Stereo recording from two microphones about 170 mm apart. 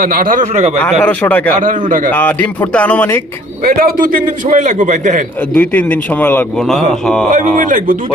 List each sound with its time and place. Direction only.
0.0 s a man's voice: 60° right (ahead or behind)
0.8 s speech: 10° left (ahead or behind)
3.6 s a man's voice: 55° right (ahead or behind)
5.5 s speech: 10° left (ahead or behind)
7.3 s a man's voice: 50° right (ahead or behind)